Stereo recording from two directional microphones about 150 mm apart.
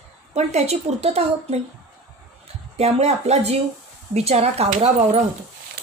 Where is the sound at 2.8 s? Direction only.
45° right (ahead or behind).